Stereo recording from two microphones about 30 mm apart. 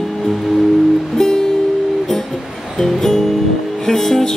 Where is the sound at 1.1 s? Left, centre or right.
Centre.